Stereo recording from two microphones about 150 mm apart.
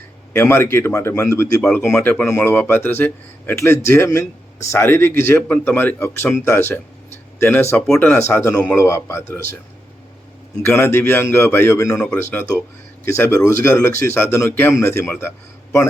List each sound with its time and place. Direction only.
0.3 s a man's voice: 15° left (ahead or behind)
10.6 s a man's voice: 15° left (ahead or behind)
11.9 s a man's voice: 10° left (ahead or behind)